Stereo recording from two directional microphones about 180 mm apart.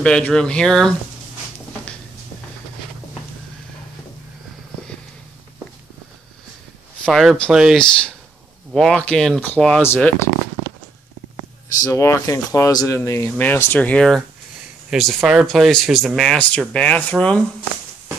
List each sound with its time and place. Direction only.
0.0 s speech: 5° left (ahead or behind)
7.1 s speech: centre (ahead or behind)
11.8 s speech: 15° left (ahead or behind)